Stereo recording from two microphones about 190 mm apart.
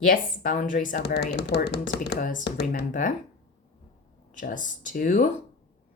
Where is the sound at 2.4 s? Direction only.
60° left (ahead or behind).